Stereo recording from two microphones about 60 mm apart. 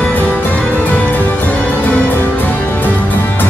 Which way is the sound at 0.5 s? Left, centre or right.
Left.